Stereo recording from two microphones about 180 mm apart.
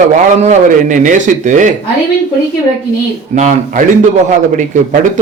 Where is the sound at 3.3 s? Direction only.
40° right (ahead or behind).